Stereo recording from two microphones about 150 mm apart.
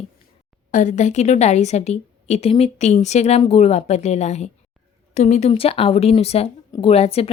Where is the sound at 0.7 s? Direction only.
55° left (ahead or behind).